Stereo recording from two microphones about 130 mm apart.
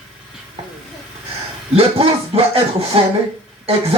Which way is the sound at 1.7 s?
50° right (ahead or behind).